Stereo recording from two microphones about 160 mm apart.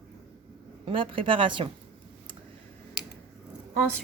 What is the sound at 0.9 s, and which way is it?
Speech, 35° right (ahead or behind).